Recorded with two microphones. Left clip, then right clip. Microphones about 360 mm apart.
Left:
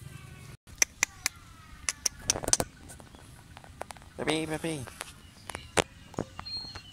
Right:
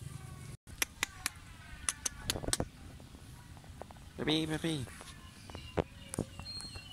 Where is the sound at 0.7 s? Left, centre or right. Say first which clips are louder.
Left 8 dB; centre.